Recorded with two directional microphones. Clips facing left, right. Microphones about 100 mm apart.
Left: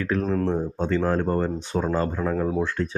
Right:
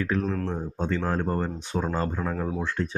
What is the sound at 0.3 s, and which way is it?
Speech, 15° left (ahead or behind).